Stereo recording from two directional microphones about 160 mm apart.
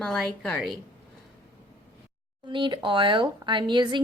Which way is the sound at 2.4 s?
30° right (ahead or behind).